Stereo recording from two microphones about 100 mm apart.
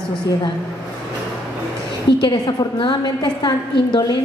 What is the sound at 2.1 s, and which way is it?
A woman's voice, 45° left (ahead or behind).